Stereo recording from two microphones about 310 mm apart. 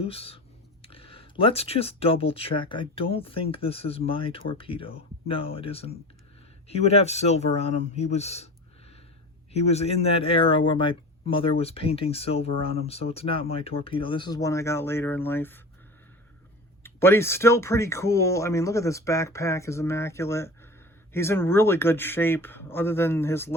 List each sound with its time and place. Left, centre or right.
0.0 s speech: centre
9.5 s speech: left
16.8 s speech: centre